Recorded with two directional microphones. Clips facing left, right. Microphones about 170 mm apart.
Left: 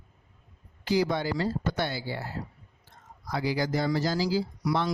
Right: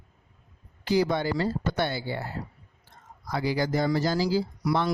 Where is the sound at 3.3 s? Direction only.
55° right (ahead or behind).